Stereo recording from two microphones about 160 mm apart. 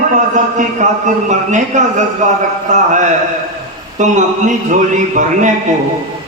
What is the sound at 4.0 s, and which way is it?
A man's voice, 50° right (ahead or behind).